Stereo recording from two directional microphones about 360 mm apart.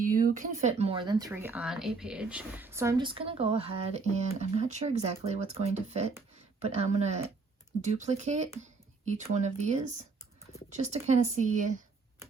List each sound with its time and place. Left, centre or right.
0.0 s speech: right